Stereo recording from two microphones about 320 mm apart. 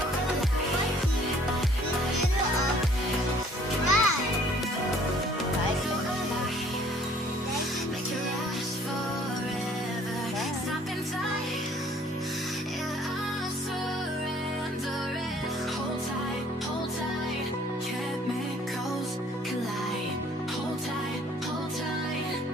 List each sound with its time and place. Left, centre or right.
3.8 s music: left